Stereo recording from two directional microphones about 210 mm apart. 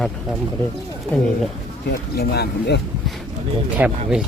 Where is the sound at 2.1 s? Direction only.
50° left (ahead or behind).